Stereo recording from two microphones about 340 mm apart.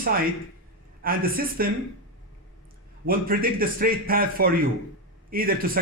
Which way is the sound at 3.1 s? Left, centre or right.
Right.